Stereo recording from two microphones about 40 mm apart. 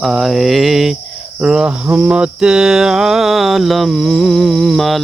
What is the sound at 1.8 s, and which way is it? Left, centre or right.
Cricket, right.